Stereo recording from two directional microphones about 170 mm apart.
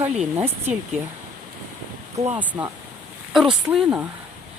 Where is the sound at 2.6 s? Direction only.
10° right (ahead or behind).